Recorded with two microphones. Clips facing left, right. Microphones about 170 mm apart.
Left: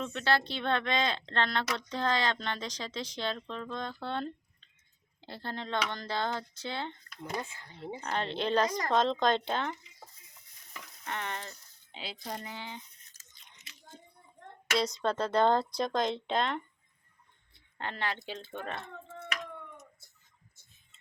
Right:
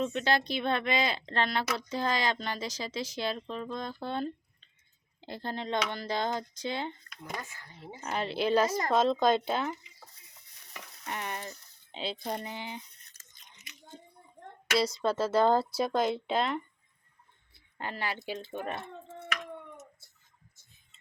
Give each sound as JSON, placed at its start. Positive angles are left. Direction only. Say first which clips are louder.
{"t": 0.0, "sound": "speech", "louder": "right 2 dB", "side_deg": -15}
{"t": 7.4, "sound": "speech", "louder": "even", "side_deg": 25}
{"t": 8.0, "sound": "speech", "louder": "right 3 dB", "side_deg": -10}
{"t": 11.0, "sound": "speech", "louder": "right 1 dB", "side_deg": -15}
{"t": 11.9, "sound": "speech", "louder": "right 6 dB", "side_deg": -25}
{"t": 13.1, "sound": "a sound", "louder": "right 1 dB", "side_deg": -60}
{"t": 14.8, "sound": "speech", "louder": "right 2 dB", "side_deg": -5}